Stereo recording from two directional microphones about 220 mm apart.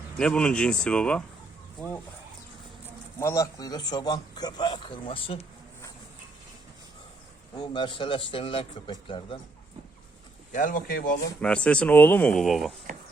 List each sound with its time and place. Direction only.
0.2 s speech: 5° left (ahead or behind)
3.2 s a man's voice: 15° left (ahead or behind)
7.5 s a man's voice: 20° left (ahead or behind)
10.5 s speech: 35° left (ahead or behind)
11.3 s speech: 5° left (ahead or behind)